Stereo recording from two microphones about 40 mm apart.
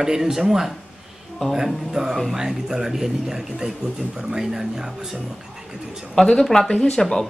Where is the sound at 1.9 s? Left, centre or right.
Centre.